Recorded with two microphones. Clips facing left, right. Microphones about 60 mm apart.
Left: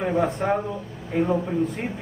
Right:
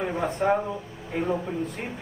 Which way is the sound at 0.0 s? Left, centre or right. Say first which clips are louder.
Left 2 dB; centre.